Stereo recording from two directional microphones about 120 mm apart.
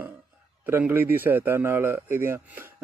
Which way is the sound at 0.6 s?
15° right (ahead or behind).